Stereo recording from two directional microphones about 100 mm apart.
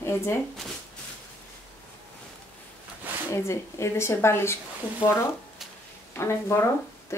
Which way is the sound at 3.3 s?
30° left (ahead or behind).